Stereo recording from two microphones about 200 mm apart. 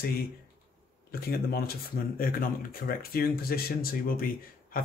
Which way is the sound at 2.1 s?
45° left (ahead or behind).